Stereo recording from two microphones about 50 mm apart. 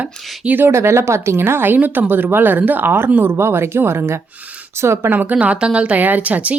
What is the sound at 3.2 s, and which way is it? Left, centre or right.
Speech, right.